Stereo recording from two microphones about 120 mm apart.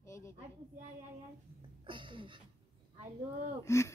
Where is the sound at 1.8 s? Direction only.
45° right (ahead or behind).